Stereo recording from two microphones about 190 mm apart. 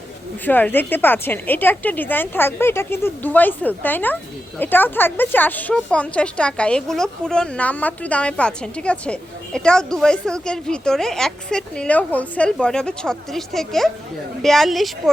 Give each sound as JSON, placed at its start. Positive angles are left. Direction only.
{"t": 0.4, "sound": "a woman's voice", "side_deg": 10}